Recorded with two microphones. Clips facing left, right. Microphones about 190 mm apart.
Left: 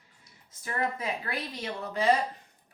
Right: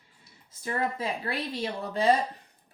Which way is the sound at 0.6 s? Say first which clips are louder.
Right 2 dB; 30° right (ahead or behind).